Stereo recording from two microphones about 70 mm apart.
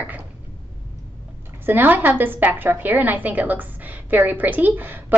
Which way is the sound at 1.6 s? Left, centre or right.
Right.